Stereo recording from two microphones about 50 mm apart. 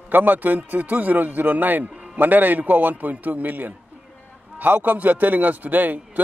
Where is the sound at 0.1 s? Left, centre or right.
Right.